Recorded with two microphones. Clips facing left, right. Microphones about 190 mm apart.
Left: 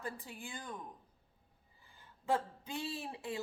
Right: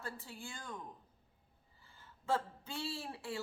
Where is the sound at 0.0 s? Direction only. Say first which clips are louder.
Left 2 dB; 15° left (ahead or behind).